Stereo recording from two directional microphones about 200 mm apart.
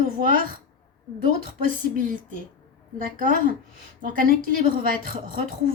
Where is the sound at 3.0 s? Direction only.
45° right (ahead or behind).